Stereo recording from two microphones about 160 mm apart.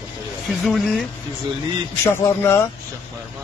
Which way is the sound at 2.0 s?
15° left (ahead or behind).